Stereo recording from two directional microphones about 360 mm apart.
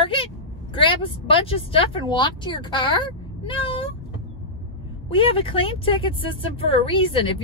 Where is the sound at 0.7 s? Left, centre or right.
Centre.